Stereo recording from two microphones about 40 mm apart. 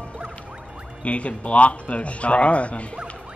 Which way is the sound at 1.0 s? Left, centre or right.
Left.